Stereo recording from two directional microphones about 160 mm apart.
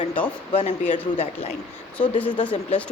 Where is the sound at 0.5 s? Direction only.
45° left (ahead or behind).